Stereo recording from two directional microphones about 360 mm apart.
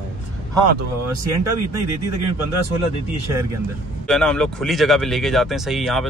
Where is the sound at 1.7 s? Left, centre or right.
Right.